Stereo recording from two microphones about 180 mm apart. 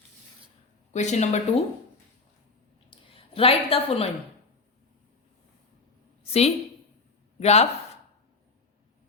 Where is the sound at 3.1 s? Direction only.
30° left (ahead or behind).